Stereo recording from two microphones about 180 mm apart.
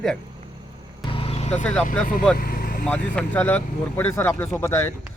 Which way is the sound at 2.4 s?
55° left (ahead or behind).